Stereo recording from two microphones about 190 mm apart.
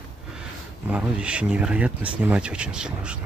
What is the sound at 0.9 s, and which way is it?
Speech, 5° right (ahead or behind).